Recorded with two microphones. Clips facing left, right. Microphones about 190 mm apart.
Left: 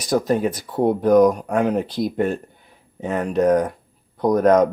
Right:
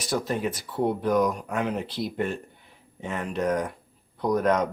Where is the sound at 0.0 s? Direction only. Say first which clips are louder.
Left 8 dB; 45° left (ahead or behind).